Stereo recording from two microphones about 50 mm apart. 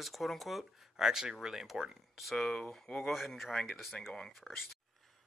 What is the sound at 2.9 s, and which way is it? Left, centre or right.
Speech, centre.